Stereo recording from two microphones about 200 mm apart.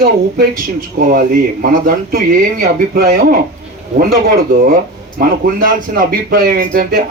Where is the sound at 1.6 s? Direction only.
45° right (ahead or behind).